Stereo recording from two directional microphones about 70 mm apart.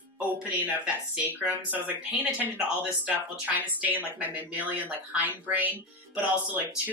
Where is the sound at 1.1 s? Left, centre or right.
Right.